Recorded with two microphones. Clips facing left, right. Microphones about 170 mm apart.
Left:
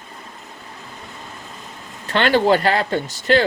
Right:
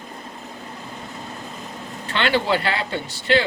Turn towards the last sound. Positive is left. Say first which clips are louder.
# left 3 dB
turn(degrees=45)  # may be behind; listen again after turning